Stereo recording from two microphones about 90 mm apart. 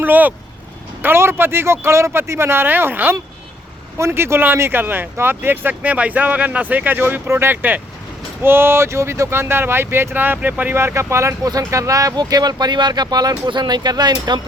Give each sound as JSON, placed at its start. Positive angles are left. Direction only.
{"t": 0.0, "sound": "speech", "side_deg": -20}